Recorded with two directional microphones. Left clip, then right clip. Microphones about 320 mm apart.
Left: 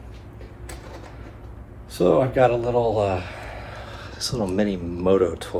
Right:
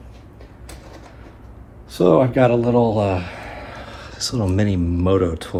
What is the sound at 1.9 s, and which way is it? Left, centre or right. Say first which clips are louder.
Speech: right 4 dB; centre.